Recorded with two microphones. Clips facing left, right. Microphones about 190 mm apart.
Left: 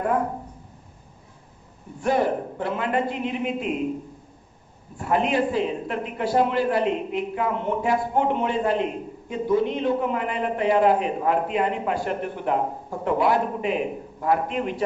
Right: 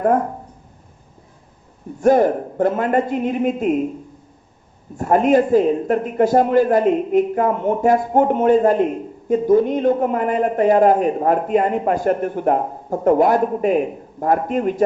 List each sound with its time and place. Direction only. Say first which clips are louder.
2.0 s a man's voice: right 8 dB; 45° right (ahead or behind)
4.9 s a man's voice: right 8 dB; 45° right (ahead or behind)